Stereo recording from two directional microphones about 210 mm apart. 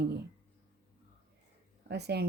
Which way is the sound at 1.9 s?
50° right (ahead or behind).